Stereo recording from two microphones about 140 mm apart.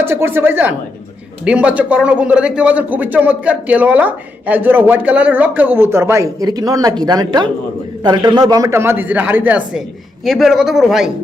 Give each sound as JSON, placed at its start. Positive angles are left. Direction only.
{"t": 0.0, "sound": "a man's voice", "side_deg": -15}